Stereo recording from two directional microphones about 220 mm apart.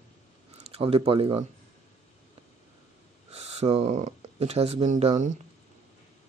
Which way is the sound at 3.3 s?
30° right (ahead or behind).